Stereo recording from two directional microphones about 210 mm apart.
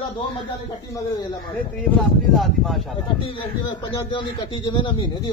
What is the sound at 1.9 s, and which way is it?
Speech, centre (ahead or behind).